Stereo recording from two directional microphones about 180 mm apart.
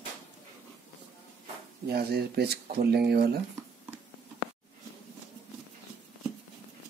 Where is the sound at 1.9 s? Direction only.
60° right (ahead or behind).